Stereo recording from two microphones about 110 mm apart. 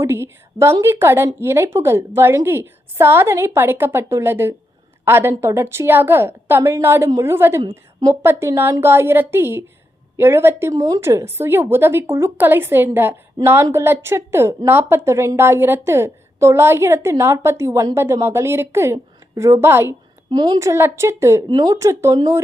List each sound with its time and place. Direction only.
0.0 s a woman's voice: 25° right (ahead or behind)
20.3 s a woman's voice: 40° right (ahead or behind)
20.6 s a woman's voice: 25° right (ahead or behind)
21.4 s a woman's voice: 40° right (ahead or behind)
21.8 s a woman's voice: 30° right (ahead or behind)